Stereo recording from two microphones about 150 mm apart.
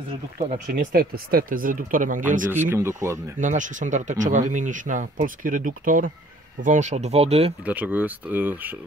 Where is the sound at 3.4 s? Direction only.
55° right (ahead or behind).